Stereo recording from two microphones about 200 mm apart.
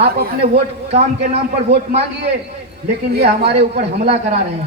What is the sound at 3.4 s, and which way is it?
Speech, 30° right (ahead or behind).